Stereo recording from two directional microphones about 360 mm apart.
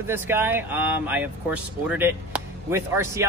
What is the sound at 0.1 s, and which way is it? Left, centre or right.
Speech, centre.